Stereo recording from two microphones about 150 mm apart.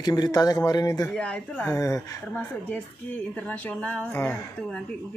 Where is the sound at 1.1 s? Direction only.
5° left (ahead or behind).